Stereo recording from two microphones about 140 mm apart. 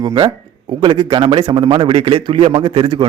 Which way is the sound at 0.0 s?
30° right (ahead or behind).